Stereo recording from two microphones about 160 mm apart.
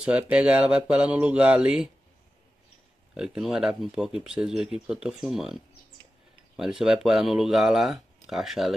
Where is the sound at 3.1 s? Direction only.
Centre (ahead or behind).